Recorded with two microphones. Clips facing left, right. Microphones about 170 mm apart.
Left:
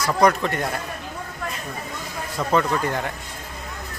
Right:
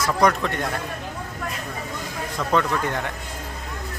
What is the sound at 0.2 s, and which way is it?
Speech, 5° left (ahead or behind).